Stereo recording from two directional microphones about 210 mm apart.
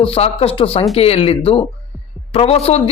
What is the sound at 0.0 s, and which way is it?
A man's voice, 25° left (ahead or behind).